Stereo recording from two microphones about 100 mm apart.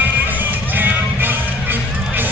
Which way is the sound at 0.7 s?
20° right (ahead or behind).